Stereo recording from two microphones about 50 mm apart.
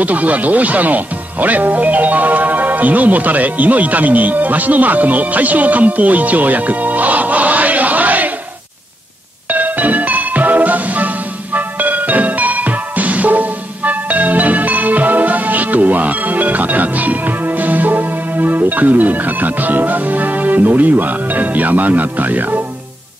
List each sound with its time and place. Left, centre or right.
0.0 s speech: right
9.5 s music: right